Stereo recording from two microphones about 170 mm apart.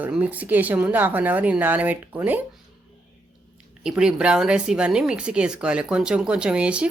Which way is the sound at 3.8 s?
5° right (ahead or behind).